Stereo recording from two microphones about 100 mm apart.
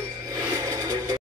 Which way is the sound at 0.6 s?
35° right (ahead or behind).